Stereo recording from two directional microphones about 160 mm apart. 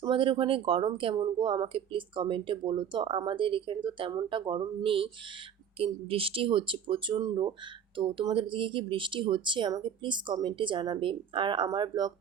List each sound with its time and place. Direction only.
0.0 s speech: 35° right (ahead or behind)